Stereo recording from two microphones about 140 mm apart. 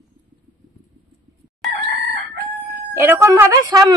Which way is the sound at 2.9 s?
20° right (ahead or behind).